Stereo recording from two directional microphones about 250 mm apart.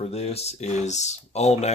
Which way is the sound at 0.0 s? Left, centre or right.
Left.